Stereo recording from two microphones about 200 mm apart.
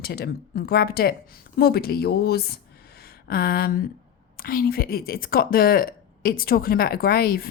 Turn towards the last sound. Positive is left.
turn(degrees=50)  # may be behind; listen again after turning